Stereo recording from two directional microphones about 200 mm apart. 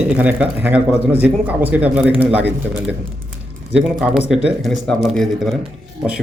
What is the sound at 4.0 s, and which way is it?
Speech, 5° right (ahead or behind).